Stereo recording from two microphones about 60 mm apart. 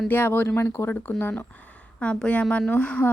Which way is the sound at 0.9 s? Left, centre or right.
Left.